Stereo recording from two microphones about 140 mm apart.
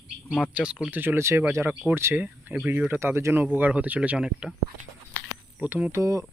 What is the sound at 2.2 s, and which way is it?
Speech, 5° right (ahead or behind).